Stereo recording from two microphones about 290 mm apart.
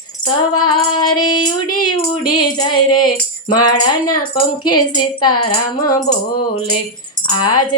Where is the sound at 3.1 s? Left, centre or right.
Centre.